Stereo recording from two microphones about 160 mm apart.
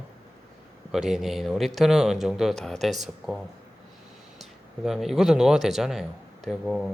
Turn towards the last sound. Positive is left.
turn(degrees=0)  # may be behind; listen again after turning